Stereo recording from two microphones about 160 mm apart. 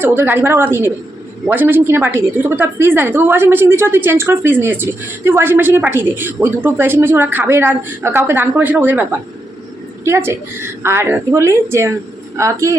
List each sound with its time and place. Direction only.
0.0 s a woman's voice: 15° right (ahead or behind)